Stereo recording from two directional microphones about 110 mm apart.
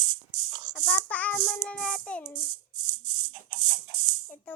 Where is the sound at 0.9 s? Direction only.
15° left (ahead or behind).